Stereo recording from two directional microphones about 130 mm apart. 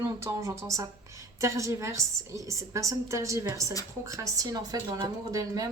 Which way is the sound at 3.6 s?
25° left (ahead or behind).